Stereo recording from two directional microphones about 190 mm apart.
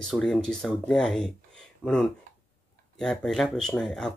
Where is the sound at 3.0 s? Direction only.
5° left (ahead or behind).